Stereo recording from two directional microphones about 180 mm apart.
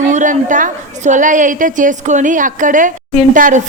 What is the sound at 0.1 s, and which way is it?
A woman's voice, 45° right (ahead or behind).